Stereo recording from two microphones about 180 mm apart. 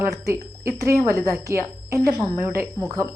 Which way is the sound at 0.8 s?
15° right (ahead or behind).